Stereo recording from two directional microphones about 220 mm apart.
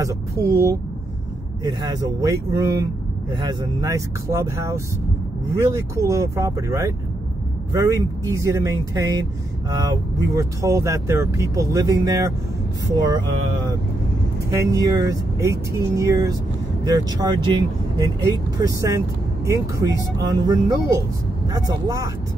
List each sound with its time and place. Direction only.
0.0 s speech: 15° right (ahead or behind)
14.5 s speech: 15° right (ahead or behind)